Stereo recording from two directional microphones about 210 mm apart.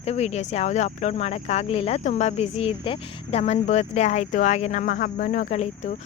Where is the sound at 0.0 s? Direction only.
30° left (ahead or behind).